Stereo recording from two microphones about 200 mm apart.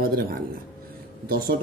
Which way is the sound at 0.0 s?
50° right (ahead or behind).